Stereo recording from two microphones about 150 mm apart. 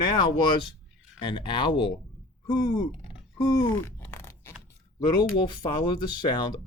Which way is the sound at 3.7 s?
15° left (ahead or behind).